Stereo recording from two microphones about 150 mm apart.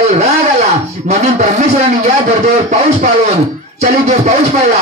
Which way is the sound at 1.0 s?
50° right (ahead or behind).